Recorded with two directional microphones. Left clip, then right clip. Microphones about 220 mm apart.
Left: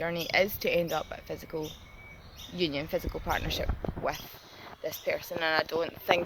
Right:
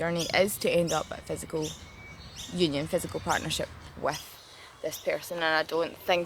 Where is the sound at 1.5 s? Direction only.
20° right (ahead or behind).